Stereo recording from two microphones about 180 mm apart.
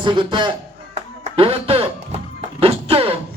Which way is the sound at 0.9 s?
35° right (ahead or behind).